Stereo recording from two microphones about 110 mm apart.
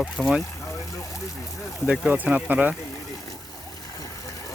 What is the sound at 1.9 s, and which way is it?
Speech, 10° right (ahead or behind).